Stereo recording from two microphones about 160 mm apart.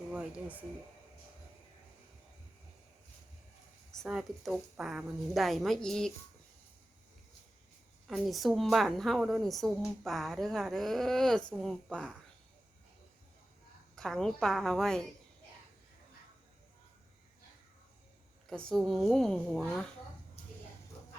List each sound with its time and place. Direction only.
0.1 s speech: 5° right (ahead or behind)
4.0 s a woman's voice: centre (ahead or behind)
8.0 s a woman's voice: centre (ahead or behind)
13.9 s a woman's voice: 5° left (ahead or behind)
18.4 s a woman's voice: 5° left (ahead or behind)